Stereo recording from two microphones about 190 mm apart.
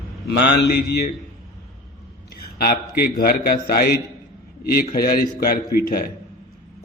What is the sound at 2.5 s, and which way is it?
A man's voice, 55° left (ahead or behind).